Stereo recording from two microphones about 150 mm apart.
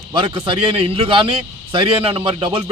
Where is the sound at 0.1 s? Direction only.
35° right (ahead or behind).